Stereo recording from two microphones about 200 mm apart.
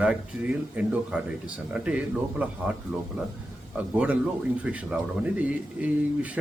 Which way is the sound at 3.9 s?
5° right (ahead or behind).